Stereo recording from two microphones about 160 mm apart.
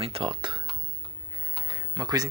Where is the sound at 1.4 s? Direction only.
25° right (ahead or behind).